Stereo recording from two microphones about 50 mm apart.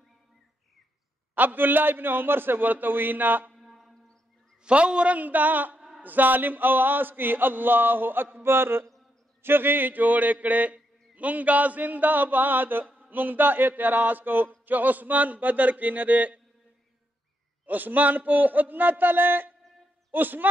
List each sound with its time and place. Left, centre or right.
1.3 s a man's voice: right
3.5 s a sound: centre
4.6 s a man's voice: right
17.6 s a man's voice: right